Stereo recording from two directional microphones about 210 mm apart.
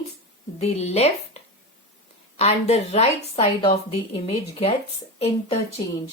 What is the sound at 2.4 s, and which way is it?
A woman's voice, 30° left (ahead or behind).